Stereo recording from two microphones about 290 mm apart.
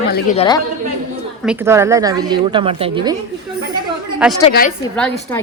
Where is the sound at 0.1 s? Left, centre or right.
Left.